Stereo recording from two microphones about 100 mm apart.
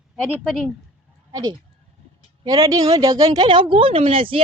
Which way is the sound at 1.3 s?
35° right (ahead or behind).